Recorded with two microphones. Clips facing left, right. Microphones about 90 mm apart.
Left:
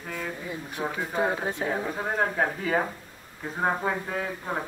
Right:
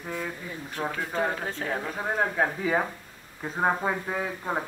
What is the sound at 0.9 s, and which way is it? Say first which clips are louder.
Speech: left 2 dB; 15° left (ahead or behind).